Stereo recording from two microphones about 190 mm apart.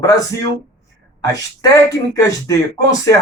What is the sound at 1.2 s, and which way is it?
Speech, 20° left (ahead or behind).